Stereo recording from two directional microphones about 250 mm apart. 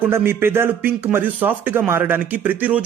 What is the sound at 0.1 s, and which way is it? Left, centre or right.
A man's voice, centre.